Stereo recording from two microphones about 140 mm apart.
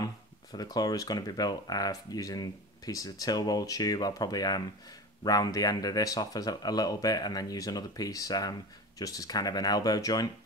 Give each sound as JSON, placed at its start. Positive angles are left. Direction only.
{"t": 0.0, "sound": "speech", "side_deg": 30}